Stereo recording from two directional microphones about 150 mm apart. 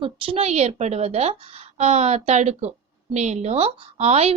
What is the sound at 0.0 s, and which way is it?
A woman's voice, 40° right (ahead or behind).